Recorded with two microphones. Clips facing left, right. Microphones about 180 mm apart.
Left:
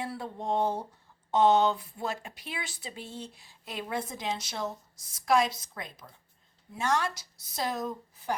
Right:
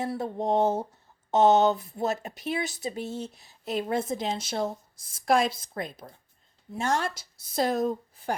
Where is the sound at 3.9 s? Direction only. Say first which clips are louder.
Right 4 dB; 25° right (ahead or behind).